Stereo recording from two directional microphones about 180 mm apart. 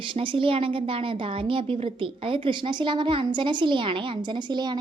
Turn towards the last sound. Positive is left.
turn(degrees=-25)  # may be behind; listen again after turning